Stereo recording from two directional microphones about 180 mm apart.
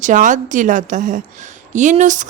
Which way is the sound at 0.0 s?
45° right (ahead or behind).